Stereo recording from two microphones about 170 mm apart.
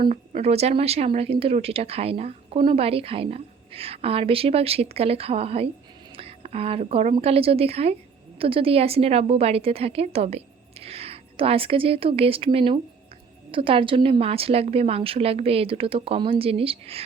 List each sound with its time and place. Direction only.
0.1 s speech: 40° right (ahead or behind)
6.1 s a sound: 35° right (ahead or behind)
7.2 s speech: 35° right (ahead or behind)